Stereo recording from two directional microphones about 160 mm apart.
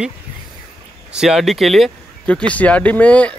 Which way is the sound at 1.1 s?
5° right (ahead or behind).